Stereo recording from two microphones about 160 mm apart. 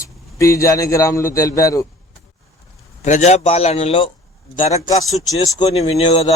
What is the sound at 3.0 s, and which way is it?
A man's voice, 45° left (ahead or behind).